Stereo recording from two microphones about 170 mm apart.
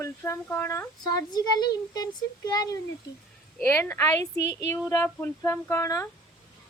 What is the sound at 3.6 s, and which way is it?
Speech, 15° left (ahead or behind).